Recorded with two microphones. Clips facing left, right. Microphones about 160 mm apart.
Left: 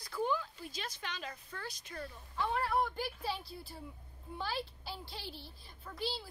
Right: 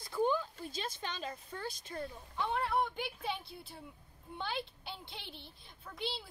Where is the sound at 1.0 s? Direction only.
30° right (ahead or behind).